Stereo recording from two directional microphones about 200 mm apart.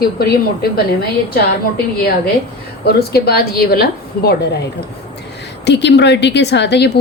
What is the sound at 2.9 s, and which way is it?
A woman's voice, 50° left (ahead or behind).